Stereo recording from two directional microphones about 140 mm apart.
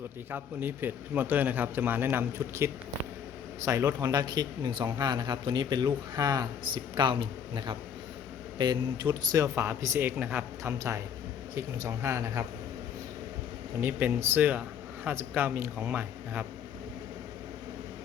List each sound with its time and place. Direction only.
0.3 s a man's voice: 15° right (ahead or behind)
13.8 s a man's voice: 15° right (ahead or behind)